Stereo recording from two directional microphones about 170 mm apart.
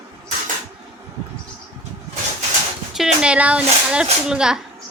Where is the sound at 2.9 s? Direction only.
5° right (ahead or behind).